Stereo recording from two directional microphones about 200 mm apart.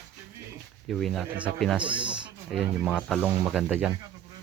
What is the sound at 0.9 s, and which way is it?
Speech, centre (ahead or behind).